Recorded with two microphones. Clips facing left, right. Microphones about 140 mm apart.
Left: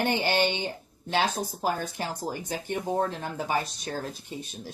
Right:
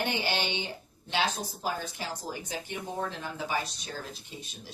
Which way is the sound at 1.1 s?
50° left (ahead or behind).